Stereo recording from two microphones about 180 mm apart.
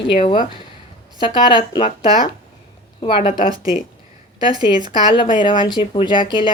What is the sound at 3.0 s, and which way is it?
Speech, 30° left (ahead or behind).